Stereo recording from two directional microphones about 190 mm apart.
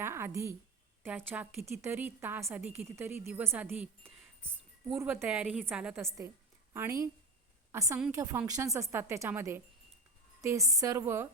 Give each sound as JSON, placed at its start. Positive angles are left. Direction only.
{"t": 0.0, "sound": "a woman's voice", "side_deg": -15}